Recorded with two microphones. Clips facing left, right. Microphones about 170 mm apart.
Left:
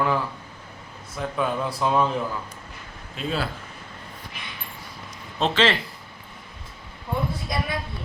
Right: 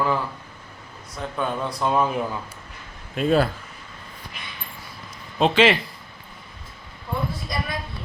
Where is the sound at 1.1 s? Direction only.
5° left (ahead or behind).